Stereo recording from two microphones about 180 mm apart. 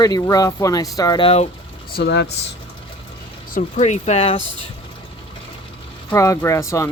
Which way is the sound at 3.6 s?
40° left (ahead or behind).